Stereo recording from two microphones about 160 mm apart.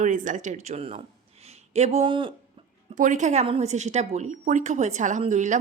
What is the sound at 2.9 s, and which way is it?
A woman's voice, 50° right (ahead or behind).